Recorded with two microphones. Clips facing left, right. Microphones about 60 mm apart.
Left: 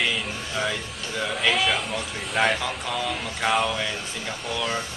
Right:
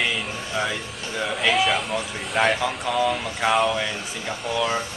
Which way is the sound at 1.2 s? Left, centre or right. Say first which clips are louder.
Right 2 dB; centre.